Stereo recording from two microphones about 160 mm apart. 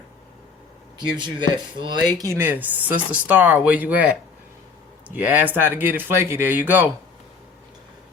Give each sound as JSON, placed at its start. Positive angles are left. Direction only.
{"t": 0.9, "sound": "speech", "side_deg": -30}
{"t": 2.2, "sound": "speech", "side_deg": -15}